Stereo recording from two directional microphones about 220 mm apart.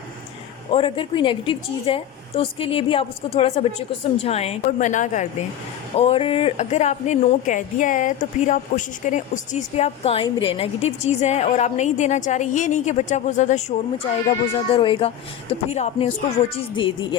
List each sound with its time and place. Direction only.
0.7 s a woman's voice: 25° left (ahead or behind)